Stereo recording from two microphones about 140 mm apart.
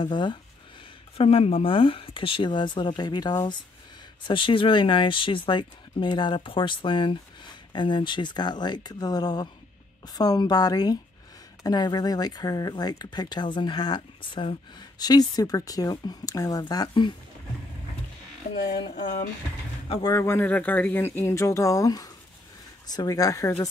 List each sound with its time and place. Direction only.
0.0 s speech: 35° left (ahead or behind)
18.5 s speech: 35° left (ahead or behind)
20.0 s speech: 20° left (ahead or behind)